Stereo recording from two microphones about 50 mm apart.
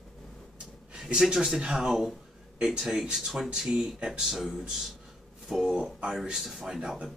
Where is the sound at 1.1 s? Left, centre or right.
Centre.